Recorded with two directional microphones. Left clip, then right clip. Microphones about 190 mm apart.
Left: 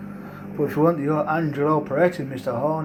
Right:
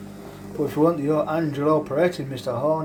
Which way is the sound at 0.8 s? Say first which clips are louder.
Right 1 dB; 20° right (ahead or behind).